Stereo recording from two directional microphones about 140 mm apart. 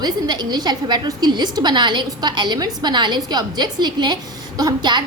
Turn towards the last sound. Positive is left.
turn(degrees=-30)  # may be behind; listen again after turning